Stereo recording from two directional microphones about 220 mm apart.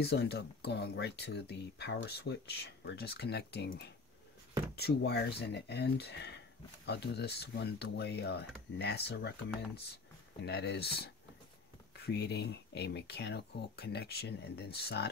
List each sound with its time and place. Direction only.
0.0 s speech: 45° left (ahead or behind)
10.4 s speech: 50° left (ahead or behind)
12.1 s speech: 50° left (ahead or behind)